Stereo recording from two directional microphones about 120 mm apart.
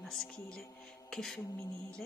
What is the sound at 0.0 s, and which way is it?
Speech, 5° left (ahead or behind).